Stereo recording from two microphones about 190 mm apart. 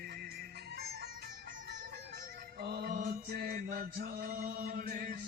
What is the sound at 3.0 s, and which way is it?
Chant, 50° right (ahead or behind).